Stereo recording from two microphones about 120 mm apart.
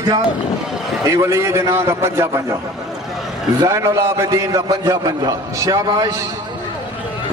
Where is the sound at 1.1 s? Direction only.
25° right (ahead or behind).